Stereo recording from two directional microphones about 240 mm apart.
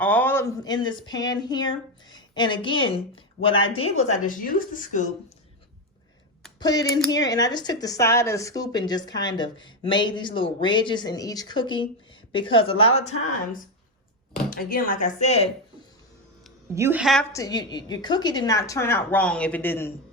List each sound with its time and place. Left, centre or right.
0.0 s a woman's voice: centre; by 5.1 s left
6.6 s speech: centre
14.5 s a woman's voice: left
16.7 s a woman's voice: centre
17.3 s speech: centre